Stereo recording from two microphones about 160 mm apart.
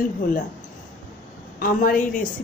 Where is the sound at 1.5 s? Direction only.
60° left (ahead or behind).